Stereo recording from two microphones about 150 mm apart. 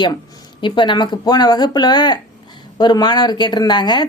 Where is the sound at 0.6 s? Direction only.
30° left (ahead or behind).